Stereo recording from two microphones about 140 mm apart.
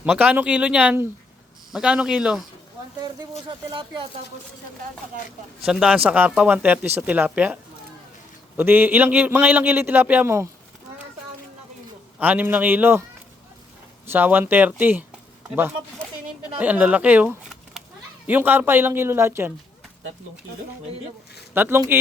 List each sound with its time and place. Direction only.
0.0 s a man's voice: 10° right (ahead or behind)
3.7 s speech: 35° right (ahead or behind)
5.6 s a man's voice: 5° right (ahead or behind)
12.2 s a man's voice: 10° right (ahead or behind)
14.1 s a man's voice: 15° right (ahead or behind)
21.5 s a man's voice: 15° right (ahead or behind)